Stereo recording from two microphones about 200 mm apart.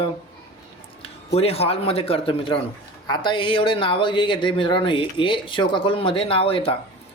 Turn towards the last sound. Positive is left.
turn(degrees=25)  # may be behind; listen again after turning